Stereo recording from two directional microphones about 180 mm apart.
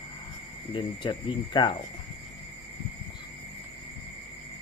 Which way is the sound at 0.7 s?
25° left (ahead or behind).